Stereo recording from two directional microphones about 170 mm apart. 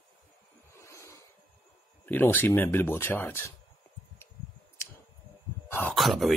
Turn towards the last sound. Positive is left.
turn(degrees=0)  # may be behind; listen again after turning